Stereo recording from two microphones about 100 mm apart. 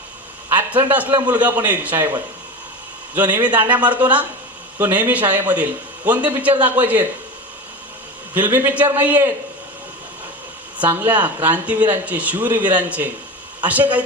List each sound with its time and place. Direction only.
0.5 s a man's voice: 20° right (ahead or behind)
8.3 s a man's voice: 20° right (ahead or behind)
10.8 s a man's voice: 20° right (ahead or behind)